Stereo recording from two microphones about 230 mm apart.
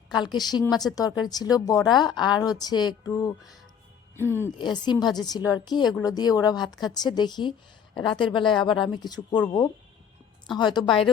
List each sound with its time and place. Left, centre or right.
0.1 s a woman's voice: centre